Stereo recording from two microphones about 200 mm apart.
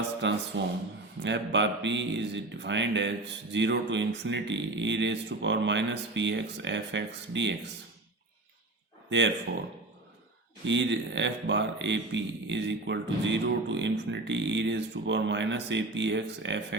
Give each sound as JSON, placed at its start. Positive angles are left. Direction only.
{"t": 0.2, "sound": "a man's voice", "side_deg": -65}
{"t": 9.0, "sound": "speech", "side_deg": -65}
{"t": 10.7, "sound": "speech", "side_deg": -65}